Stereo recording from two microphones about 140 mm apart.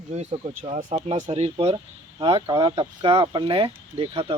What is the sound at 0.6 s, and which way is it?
Speech, 65° right (ahead or behind).